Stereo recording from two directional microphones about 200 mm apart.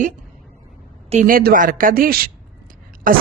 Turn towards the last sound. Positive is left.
turn(degrees=-45)  # may be behind; listen again after turning